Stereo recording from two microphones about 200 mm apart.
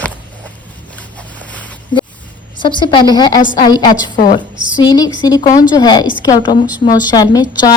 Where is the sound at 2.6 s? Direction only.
25° left (ahead or behind).